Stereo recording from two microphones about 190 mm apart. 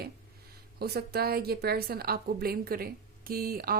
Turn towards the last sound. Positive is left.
turn(degrees=-50)  # may be behind; listen again after turning